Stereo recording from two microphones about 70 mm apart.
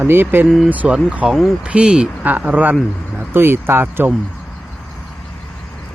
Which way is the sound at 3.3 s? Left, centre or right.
Right.